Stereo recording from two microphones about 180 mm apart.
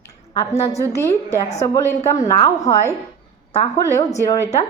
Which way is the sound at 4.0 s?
20° left (ahead or behind).